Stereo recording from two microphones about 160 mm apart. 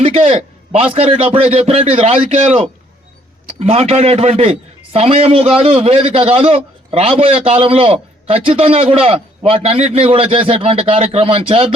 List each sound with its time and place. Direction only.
0.0 s a man's voice: 35° right (ahead or behind)
3.6 s a man's voice: 40° right (ahead or behind)